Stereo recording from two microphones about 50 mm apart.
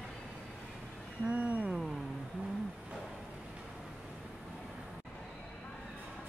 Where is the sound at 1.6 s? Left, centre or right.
Centre.